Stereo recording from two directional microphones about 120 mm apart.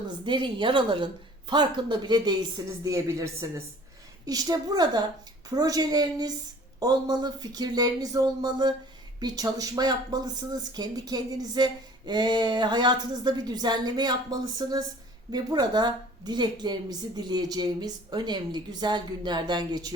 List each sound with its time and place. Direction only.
0.3 s speech: 45° right (ahead or behind)